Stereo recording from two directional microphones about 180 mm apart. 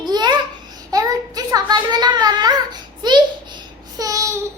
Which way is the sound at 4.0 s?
20° right (ahead or behind).